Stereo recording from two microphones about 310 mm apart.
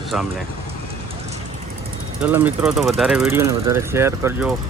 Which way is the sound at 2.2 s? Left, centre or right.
Centre.